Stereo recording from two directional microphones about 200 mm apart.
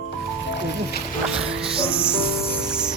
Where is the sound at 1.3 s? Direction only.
5° right (ahead or behind).